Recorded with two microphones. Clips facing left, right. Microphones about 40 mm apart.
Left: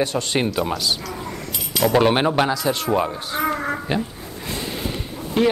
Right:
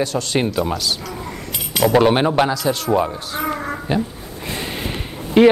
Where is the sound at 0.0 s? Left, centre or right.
Centre.